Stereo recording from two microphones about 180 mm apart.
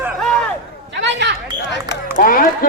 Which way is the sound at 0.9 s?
80° right.